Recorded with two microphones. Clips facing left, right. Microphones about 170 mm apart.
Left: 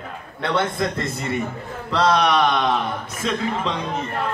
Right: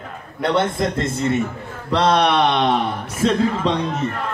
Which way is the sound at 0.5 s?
25° right (ahead or behind).